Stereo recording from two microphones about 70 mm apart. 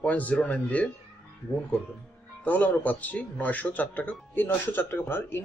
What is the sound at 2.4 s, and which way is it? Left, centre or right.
Speech, left.